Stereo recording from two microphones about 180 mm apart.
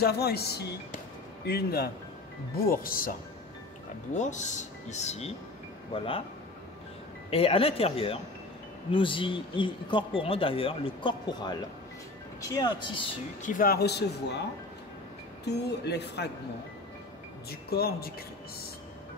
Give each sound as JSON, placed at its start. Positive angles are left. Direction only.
{"t": 0.0, "sound": "speech", "side_deg": 60}
{"t": 4.1, "sound": "speech", "side_deg": 40}
{"t": 7.2, "sound": "speech", "side_deg": 30}
{"t": 13.4, "sound": "speech", "side_deg": 50}
{"t": 15.4, "sound": "speech", "side_deg": 70}
{"t": 17.5, "sound": "speech", "side_deg": 60}